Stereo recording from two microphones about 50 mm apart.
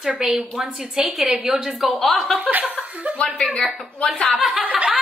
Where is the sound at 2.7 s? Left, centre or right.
Right.